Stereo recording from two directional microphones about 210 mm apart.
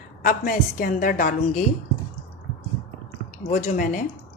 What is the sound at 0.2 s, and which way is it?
A woman's voice, 40° left (ahead or behind).